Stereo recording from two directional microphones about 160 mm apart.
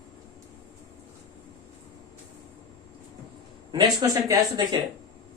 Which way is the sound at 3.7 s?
25° right (ahead or behind).